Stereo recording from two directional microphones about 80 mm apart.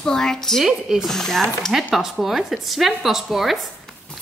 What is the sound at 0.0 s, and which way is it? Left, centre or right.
A woman's voice, centre.